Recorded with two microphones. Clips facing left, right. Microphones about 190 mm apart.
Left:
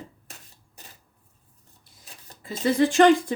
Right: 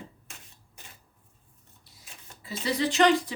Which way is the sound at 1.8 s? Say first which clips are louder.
Left 2 dB; 45° left (ahead or behind).